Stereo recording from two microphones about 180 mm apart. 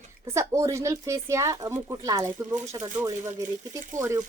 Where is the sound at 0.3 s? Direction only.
15° right (ahead or behind).